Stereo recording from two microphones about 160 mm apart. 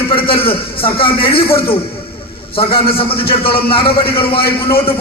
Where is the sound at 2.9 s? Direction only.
35° left (ahead or behind).